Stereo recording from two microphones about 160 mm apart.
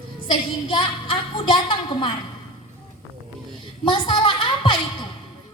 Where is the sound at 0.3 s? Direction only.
30° left (ahead or behind).